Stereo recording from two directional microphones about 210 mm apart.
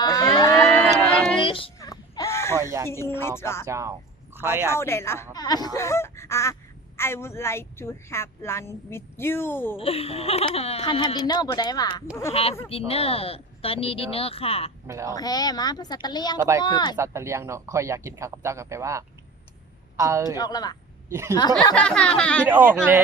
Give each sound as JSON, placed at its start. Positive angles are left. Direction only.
{"t": 0.0, "sound": "moo", "side_deg": 15}
{"t": 0.5, "sound": "a sound", "side_deg": 5}
{"t": 1.4, "sound": "a sound", "side_deg": 25}
{"t": 3.2, "sound": "speech", "side_deg": 10}
{"t": 3.7, "sound": "speech", "side_deg": -15}
{"t": 4.7, "sound": "speech", "side_deg": 10}
{"t": 9.7, "sound": "speech", "side_deg": 25}
{"t": 14.8, "sound": "speech", "side_deg": -15}
{"t": 15.1, "sound": "speech", "side_deg": 20}
{"t": 16.9, "sound": "speech", "side_deg": -15}
{"t": 20.3, "sound": "speech", "side_deg": 20}
{"t": 21.1, "sound": "speech", "side_deg": -15}
{"t": 21.8, "sound": "speech", "side_deg": 5}
{"t": 22.4, "sound": "speech", "side_deg": -10}